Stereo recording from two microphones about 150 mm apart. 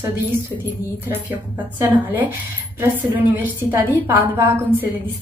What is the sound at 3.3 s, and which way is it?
A woman's voice, 15° right (ahead or behind).